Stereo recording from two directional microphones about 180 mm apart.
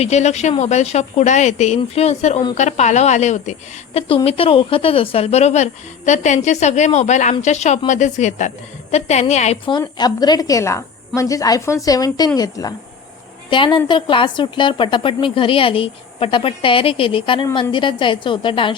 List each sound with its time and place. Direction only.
0.0 s a woman's voice: 40° left (ahead or behind)
9.6 s a woman's voice: 25° left (ahead or behind)